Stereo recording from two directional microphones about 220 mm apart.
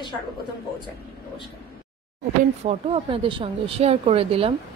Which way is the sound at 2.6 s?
25° right (ahead or behind).